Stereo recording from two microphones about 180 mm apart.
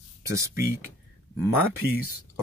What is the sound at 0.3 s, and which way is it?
Speech, 15° right (ahead or behind).